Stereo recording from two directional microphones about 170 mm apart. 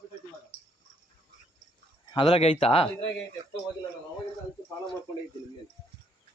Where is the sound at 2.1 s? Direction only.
30° left (ahead or behind).